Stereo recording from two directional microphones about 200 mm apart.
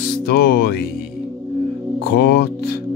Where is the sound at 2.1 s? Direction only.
50° left (ahead or behind).